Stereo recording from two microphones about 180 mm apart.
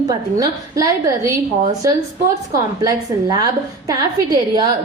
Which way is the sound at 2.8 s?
20° right (ahead or behind).